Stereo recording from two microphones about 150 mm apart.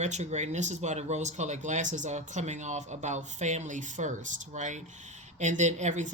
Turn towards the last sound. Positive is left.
turn(degrees=-55)  # may be behind; listen again after turning